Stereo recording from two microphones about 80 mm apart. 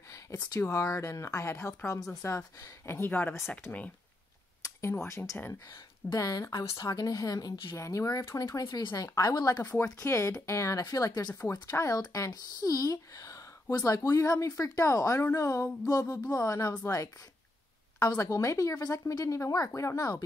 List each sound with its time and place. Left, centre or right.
0.6 s speech: left
4.6 s speech: left
9.7 s speech: left